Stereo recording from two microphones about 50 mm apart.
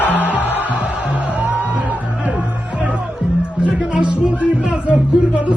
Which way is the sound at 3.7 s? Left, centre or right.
Centre.